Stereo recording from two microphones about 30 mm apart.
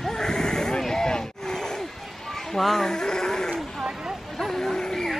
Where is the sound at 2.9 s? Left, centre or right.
Centre.